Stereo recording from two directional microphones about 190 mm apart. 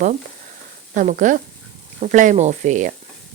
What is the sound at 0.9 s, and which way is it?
Speech, 40° right (ahead or behind).